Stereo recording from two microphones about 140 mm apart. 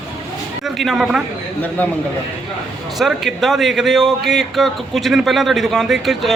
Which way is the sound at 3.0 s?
Centre (ahead or behind).